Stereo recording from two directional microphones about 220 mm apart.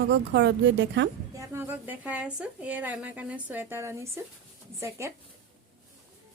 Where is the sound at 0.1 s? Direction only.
55° right (ahead or behind).